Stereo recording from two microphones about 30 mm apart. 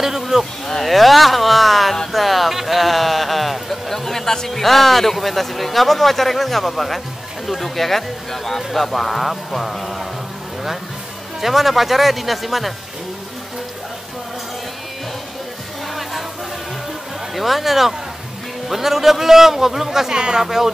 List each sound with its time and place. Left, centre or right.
0.3 s speech: right
0.8 s speech: centre
3.9 s speech: centre
11.4 s speech: centre
16.0 s music: centre
17.4 s a man's voice: centre
20.2 s speech: right
20.4 s a man's voice: centre